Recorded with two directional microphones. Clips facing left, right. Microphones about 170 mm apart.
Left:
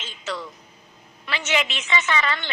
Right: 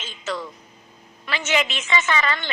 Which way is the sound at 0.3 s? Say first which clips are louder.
Right 2 dB; 50° right (ahead or behind).